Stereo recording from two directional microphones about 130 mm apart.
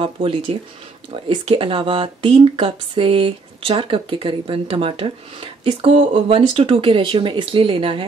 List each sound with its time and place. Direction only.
0.0 s speech: 45° right (ahead or behind)